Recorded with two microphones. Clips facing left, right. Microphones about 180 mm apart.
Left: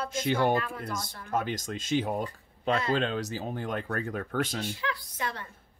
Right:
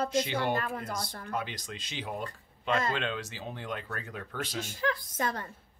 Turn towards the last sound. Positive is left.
turn(degrees=-45)  # may be behind; listen again after turning